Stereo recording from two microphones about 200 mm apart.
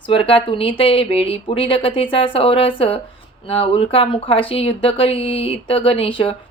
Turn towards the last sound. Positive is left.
turn(degrees=25)  # may be behind; listen again after turning